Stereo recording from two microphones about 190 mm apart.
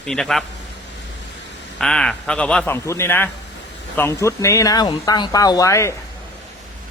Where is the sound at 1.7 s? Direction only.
5° left (ahead or behind).